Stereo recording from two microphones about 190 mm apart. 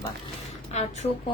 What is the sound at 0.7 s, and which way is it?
Speech, 35° left (ahead or behind).